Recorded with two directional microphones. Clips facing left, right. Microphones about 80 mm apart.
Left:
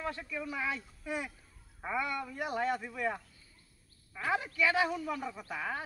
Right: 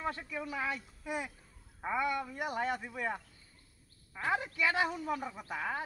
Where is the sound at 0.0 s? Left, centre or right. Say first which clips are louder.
Even; centre.